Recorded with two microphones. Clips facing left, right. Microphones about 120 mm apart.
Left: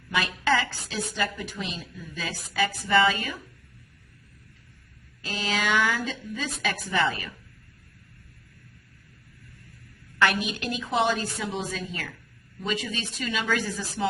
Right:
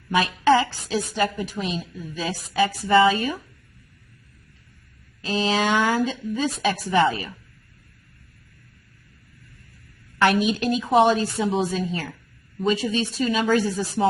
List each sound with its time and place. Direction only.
0.1 s a woman's voice: 35° right (ahead or behind)
1.7 s a woman's voice: 30° right (ahead or behind)
5.3 s a woman's voice: 25° right (ahead or behind)
10.6 s a woman's voice: 25° right (ahead or behind)